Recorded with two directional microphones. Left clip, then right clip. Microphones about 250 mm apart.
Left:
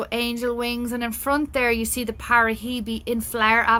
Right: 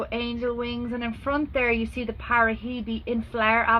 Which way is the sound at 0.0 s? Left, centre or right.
Left.